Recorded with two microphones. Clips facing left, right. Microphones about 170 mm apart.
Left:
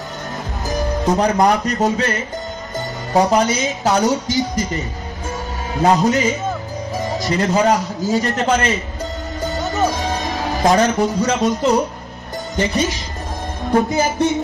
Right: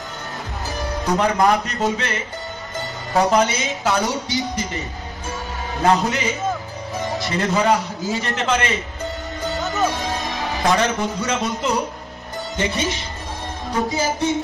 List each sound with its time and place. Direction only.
1.1 s a man's voice: 40° left (ahead or behind)
3.4 s a man's voice: 40° left (ahead or behind)
5.9 s a man's voice: 40° left (ahead or behind)
9.4 s music: 40° left (ahead or behind)
10.0 s a man's voice: 40° left (ahead or behind)
13.7 s music: 65° left (ahead or behind)